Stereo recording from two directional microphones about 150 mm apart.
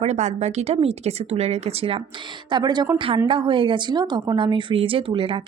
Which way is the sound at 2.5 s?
30° right (ahead or behind).